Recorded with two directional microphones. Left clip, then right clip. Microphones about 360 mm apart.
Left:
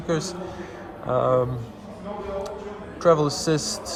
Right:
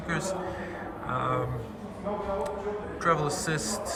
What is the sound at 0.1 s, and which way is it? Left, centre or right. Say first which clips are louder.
Speech: left 5 dB; centre.